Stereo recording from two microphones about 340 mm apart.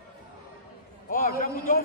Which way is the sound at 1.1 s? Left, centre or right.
Left.